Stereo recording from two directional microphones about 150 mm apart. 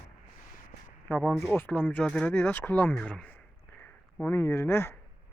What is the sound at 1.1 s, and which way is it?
Speech, 10° left (ahead or behind).